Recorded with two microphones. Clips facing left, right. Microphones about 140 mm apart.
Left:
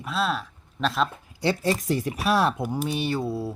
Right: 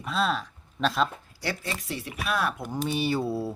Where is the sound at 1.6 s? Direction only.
40° left (ahead or behind).